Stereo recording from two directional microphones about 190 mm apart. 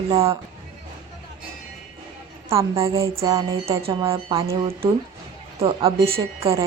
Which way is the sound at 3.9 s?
30° right (ahead or behind).